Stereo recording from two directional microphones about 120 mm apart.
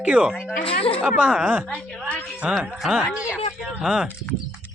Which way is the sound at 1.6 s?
10° left (ahead or behind).